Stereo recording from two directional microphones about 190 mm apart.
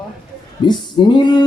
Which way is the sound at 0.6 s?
25° left (ahead or behind).